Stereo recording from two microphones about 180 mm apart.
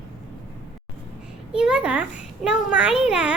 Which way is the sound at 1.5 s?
5° right (ahead or behind).